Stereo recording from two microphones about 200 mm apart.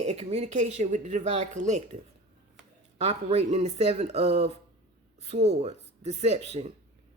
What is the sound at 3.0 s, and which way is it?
A woman's voice, 30° right (ahead or behind).